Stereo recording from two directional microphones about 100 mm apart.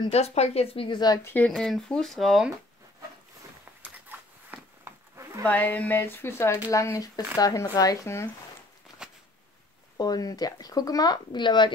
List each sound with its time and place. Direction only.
0.1 s speech: 90° left; by 1.2 s 45° left (ahead or behind)
1.2 s speech: 15° left (ahead or behind)
1.5 s speech: centre (ahead or behind)
4.1 s a sound: 20° right (ahead or behind)
5.4 s speech: 15° left (ahead or behind)
9.0 s a sound: 5° right (ahead or behind)
9.9 s speech: 40° left (ahead or behind)